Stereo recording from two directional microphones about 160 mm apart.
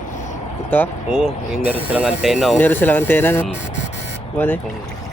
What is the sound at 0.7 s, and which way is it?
Speech, 10° left (ahead or behind).